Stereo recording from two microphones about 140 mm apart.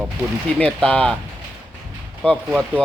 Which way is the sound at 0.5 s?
10° left (ahead or behind).